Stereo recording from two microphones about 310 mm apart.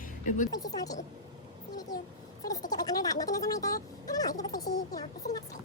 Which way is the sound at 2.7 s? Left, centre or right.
Centre.